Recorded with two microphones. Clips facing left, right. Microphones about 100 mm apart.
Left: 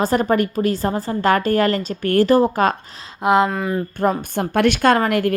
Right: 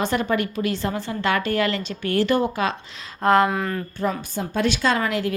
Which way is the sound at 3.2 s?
15° left (ahead or behind).